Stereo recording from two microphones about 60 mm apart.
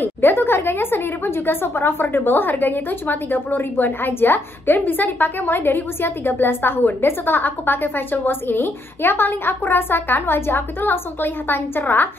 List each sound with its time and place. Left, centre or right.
0.0 s speech: left